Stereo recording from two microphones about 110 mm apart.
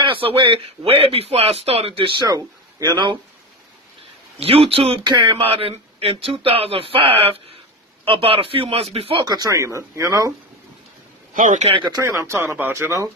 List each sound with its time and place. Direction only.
0.0 s speech: 50° right (ahead or behind)
2.2 s speech: 35° right (ahead or behind)
4.4 s speech: 60° right (ahead or behind)
5.0 s speech: 45° right (ahead or behind); by 9.2 s 60° right (ahead or behind)
9.2 s speech: 35° right (ahead or behind)
11.5 s speech: 80° right
11.9 s speech: 25° right (ahead or behind)